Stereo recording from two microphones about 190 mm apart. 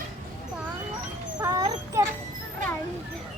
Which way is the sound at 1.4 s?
20° right (ahead or behind).